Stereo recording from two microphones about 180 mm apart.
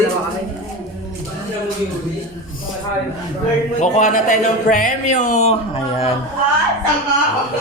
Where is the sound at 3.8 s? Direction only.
45° left (ahead or behind).